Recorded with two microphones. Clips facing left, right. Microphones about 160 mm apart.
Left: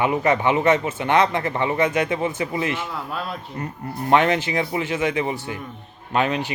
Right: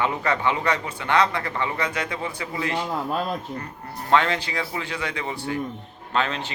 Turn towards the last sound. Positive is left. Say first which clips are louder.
# left 4 dB
turn(degrees=15)  # may be behind; listen again after turning